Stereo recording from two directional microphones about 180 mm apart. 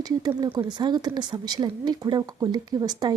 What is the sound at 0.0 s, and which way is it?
Speech, 20° right (ahead or behind).